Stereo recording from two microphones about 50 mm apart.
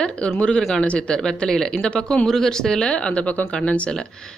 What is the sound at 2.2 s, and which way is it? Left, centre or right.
Speech, centre.